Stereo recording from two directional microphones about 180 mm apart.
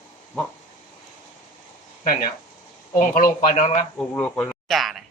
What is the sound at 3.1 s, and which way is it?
Speech, 45° left (ahead or behind).